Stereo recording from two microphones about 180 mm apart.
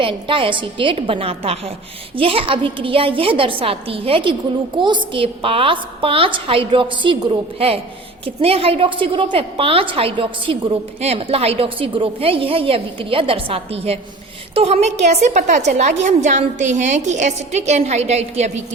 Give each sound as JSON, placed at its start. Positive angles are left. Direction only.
{"t": 0.0, "sound": "a woman's voice", "side_deg": -30}